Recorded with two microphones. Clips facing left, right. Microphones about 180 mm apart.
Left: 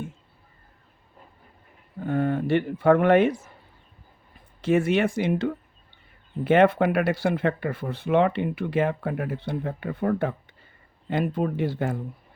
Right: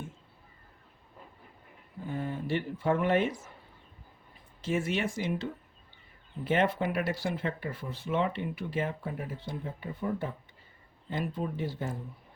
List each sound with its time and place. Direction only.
2.0 s speech: 65° left (ahead or behind)
4.6 s speech: 65° left (ahead or behind)